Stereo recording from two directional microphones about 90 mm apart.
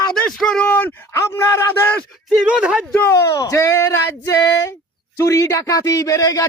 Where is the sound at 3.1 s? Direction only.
35° left (ahead or behind).